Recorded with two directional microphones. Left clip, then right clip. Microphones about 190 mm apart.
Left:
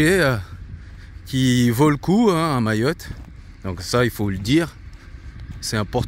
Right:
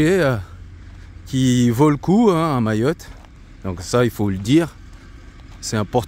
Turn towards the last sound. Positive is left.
turn(degrees=-10)  # may be behind; listen again after turning